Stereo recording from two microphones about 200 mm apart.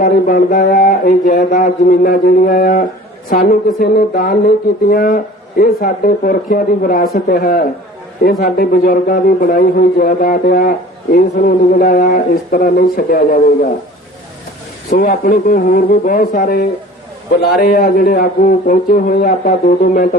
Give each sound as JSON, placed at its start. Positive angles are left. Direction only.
{"t": 0.0, "sound": "a man's voice", "side_deg": 45}
{"t": 14.8, "sound": "a man's voice", "side_deg": 45}